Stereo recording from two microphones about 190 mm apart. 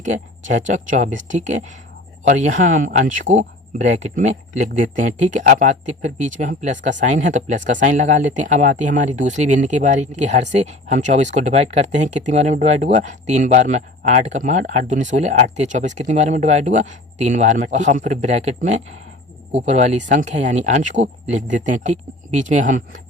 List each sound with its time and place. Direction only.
0.0 s speech: 40° right (ahead or behind)